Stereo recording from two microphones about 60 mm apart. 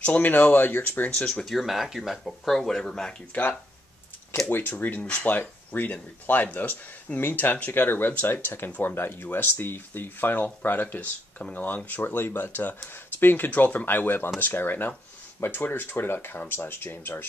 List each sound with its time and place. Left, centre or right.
0.0 s speech: left
1.1 s speech: centre
1.4 s speech: centre
4.5 s speech: left